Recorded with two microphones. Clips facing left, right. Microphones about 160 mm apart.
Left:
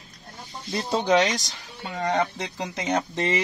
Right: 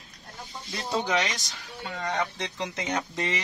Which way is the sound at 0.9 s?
30° left (ahead or behind).